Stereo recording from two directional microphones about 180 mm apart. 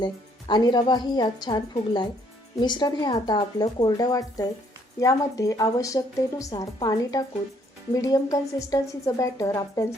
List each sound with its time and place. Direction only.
0.0 s a woman's voice: 25° left (ahead or behind)